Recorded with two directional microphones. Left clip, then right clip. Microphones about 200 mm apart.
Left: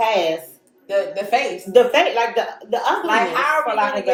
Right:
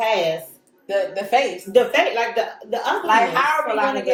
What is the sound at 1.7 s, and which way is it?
Speech, 20° left (ahead or behind).